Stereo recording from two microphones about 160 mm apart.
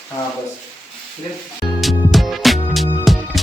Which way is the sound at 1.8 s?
Centre (ahead or behind).